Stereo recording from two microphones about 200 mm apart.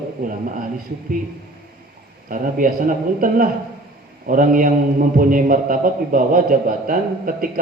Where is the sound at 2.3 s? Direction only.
45° right (ahead or behind).